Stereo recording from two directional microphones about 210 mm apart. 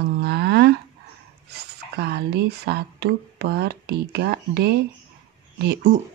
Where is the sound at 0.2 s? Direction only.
50° right (ahead or behind).